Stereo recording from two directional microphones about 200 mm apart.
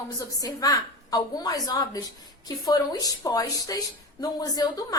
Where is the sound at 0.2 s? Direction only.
15° left (ahead or behind).